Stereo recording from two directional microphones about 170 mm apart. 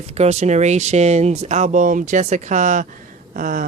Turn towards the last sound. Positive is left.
turn(degrees=-50)  # may be behind; listen again after turning